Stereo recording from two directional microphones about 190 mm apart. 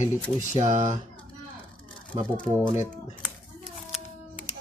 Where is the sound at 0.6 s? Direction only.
40° right (ahead or behind).